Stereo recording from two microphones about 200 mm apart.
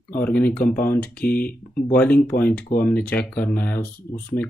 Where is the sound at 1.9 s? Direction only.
5° left (ahead or behind).